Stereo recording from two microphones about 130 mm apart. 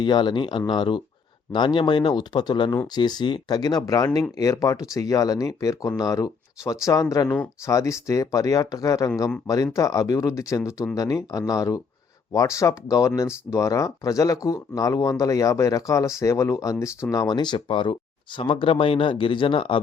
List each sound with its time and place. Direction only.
0.0 s speech: 35° left (ahead or behind)